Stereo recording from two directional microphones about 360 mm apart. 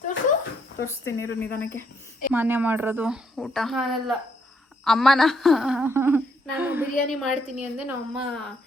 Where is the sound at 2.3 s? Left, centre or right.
Centre.